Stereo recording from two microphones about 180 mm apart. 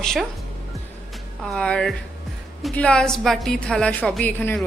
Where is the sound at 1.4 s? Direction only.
5° left (ahead or behind).